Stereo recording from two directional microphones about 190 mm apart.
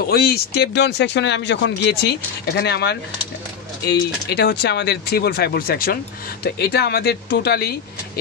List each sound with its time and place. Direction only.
0.1 s speech: 55° left (ahead or behind)
4.3 s speech: 60° left (ahead or behind)